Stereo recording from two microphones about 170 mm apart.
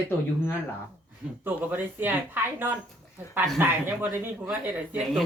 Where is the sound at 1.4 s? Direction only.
10° right (ahead or behind).